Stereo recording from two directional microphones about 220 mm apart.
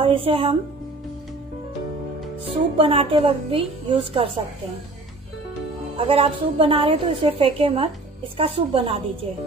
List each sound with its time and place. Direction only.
0.0 s speech: 25° right (ahead or behind)
2.4 s a woman's voice: 25° right (ahead or behind)
5.9 s a woman's voice: 25° right (ahead or behind)